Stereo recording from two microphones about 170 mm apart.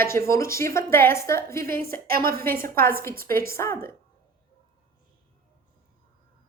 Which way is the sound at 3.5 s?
15° left (ahead or behind).